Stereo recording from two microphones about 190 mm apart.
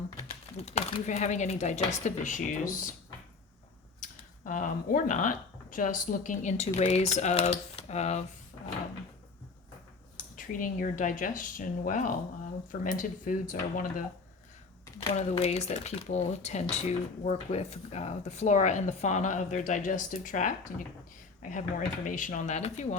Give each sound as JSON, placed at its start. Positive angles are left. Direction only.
{"t": 0.6, "sound": "speech", "side_deg": 35}
{"t": 4.4, "sound": "speech", "side_deg": 45}
{"t": 10.2, "sound": "speech", "side_deg": 45}
{"t": 15.1, "sound": "speech", "side_deg": 35}